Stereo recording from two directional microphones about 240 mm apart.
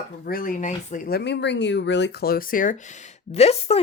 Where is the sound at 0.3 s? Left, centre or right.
Left.